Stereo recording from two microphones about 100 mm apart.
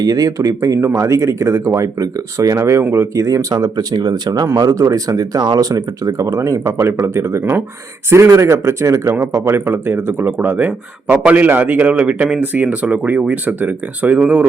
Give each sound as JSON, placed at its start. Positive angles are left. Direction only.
{"t": 0.0, "sound": "speech", "side_deg": -35}